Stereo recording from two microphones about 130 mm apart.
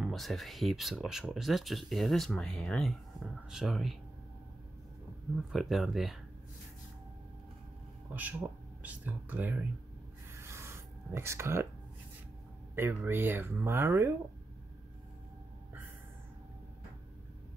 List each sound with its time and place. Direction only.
0.0 s speech: centre (ahead or behind)
5.5 s speech: centre (ahead or behind)
8.1 s speech: 15° right (ahead or behind)
10.3 s rub: 20° right (ahead or behind)
11.1 s speech: 20° right (ahead or behind)
12.7 s speech: 15° right (ahead or behind)